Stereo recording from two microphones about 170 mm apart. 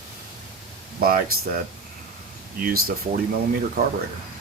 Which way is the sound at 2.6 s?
60° right (ahead or behind).